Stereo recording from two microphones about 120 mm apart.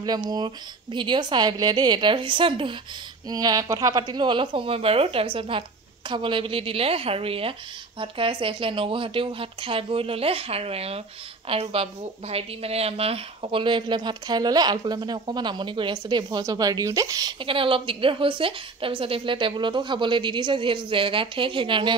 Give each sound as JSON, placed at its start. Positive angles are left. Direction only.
{"t": 0.9, "sound": "a woman's voice", "side_deg": -40}
{"t": 3.3, "sound": "a woman's voice", "side_deg": -35}
{"t": 17.4, "sound": "a woman's voice", "side_deg": -45}